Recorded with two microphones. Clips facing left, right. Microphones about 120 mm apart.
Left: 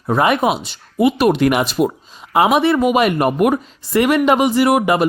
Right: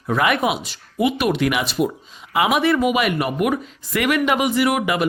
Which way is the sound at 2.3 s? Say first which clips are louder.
Left 4 dB; 30° left (ahead or behind).